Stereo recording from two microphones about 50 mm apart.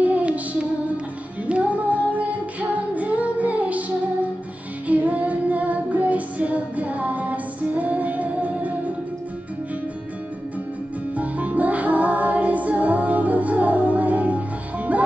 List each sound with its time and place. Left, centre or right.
0.0 s music: right
1.5 s music: right
4.8 s music: right
11.1 s music: right